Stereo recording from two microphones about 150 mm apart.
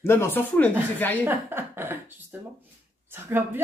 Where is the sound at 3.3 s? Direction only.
15° right (ahead or behind).